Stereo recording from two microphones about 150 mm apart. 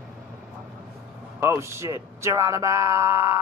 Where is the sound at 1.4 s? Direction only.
20° right (ahead or behind).